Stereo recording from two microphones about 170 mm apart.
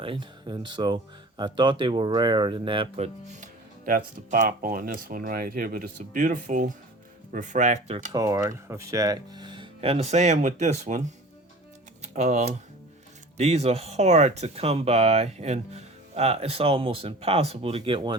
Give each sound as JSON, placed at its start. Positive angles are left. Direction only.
{"t": 0.0, "sound": "speech", "side_deg": -30}
{"t": 3.2, "sound": "speech", "side_deg": -50}
{"t": 8.1, "sound": "speech", "side_deg": -20}
{"t": 12.1, "sound": "speech", "side_deg": -40}